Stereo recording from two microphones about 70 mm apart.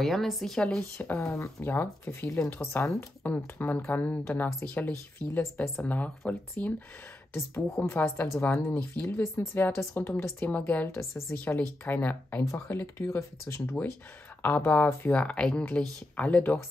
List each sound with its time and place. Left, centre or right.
0.0 s a woman's voice: centre
1.0 s speech: left
3.3 s speech: left
4.5 s speech: left
7.3 s a woman's voice: left
12.4 s speech: left